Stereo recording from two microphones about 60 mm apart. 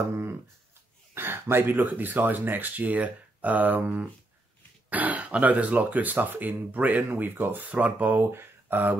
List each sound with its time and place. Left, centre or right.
1.1 s speech: right